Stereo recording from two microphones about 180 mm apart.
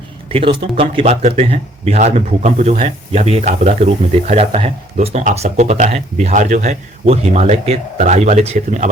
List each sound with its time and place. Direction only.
0.3 s speech: 30° right (ahead or behind)